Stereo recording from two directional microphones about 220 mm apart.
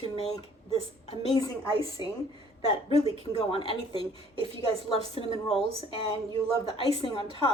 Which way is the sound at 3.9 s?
25° right (ahead or behind).